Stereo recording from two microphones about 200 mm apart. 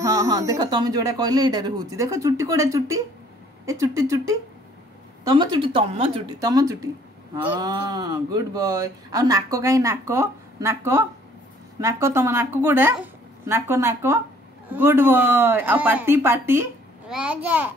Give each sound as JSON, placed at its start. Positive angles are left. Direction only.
{"t": 0.0, "sound": "speech", "side_deg": -15}